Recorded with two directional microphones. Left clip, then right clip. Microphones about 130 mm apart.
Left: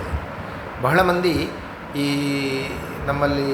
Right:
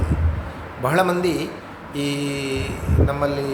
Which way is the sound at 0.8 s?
15° right (ahead or behind).